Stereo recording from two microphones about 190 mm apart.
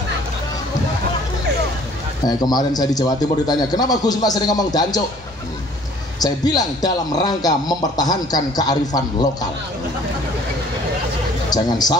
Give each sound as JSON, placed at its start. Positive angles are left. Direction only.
{"t": 2.2, "sound": "speech", "side_deg": 20}
{"t": 6.1, "sound": "speech", "side_deg": 20}
{"t": 11.5, "sound": "speech", "side_deg": 20}